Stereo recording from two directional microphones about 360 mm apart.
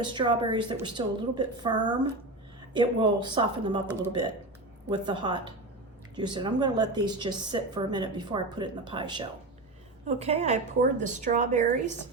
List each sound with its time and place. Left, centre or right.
0.0 s a woman's voice: centre